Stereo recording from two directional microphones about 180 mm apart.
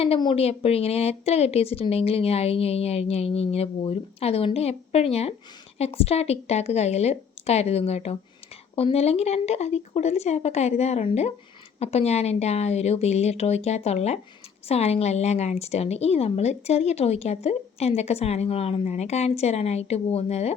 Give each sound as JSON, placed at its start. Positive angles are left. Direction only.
{"t": 0.0, "sound": "a woman's voice", "side_deg": 30}